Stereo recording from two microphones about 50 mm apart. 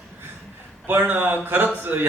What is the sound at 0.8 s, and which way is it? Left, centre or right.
A man's voice, right.